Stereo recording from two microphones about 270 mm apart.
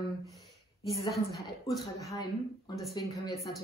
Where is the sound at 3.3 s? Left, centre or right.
Centre.